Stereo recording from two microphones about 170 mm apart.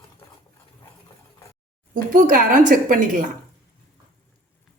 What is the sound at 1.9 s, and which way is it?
Speech, 50° right (ahead or behind).